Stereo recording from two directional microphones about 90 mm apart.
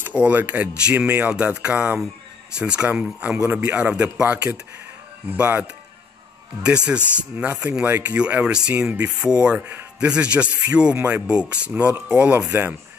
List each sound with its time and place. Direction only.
0.1 s speech: 15° right (ahead or behind)
5.4 s speech: 20° right (ahead or behind)
6.9 s speech: 15° right (ahead or behind)